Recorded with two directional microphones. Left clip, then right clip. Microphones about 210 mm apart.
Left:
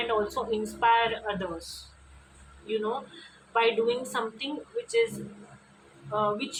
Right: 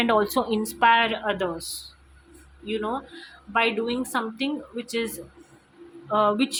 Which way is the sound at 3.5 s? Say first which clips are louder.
Right 1 dB; 40° right (ahead or behind).